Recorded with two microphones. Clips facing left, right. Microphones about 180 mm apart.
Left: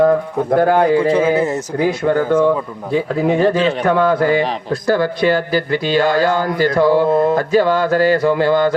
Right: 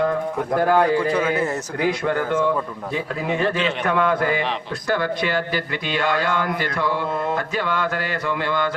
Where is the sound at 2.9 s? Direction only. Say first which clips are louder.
Left 9 dB; 35° left (ahead or behind).